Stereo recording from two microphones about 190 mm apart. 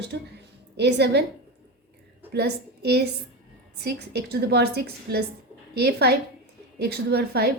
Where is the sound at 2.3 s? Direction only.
60° right (ahead or behind).